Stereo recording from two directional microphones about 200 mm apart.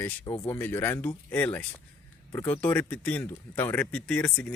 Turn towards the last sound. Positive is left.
turn(degrees=5)  # may be behind; listen again after turning